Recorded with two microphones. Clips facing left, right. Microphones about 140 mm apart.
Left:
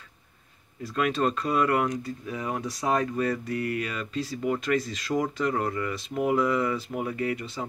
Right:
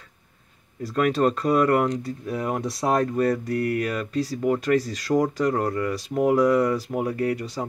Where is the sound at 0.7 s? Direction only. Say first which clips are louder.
Right 5 dB; 45° right (ahead or behind).